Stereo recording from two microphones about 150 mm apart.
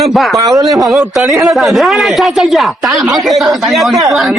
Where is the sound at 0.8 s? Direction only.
Centre (ahead or behind).